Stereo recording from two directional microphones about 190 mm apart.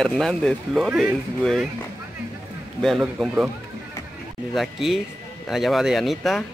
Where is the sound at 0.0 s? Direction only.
Centre (ahead or behind).